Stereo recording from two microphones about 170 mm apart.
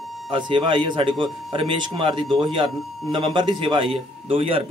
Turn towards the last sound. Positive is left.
turn(degrees=-35)  # may be behind; listen again after turning